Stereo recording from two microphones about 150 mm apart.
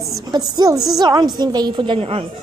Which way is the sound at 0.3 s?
25° right (ahead or behind).